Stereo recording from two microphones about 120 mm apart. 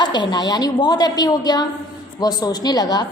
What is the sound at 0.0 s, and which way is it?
A woman's voice, 40° left (ahead or behind).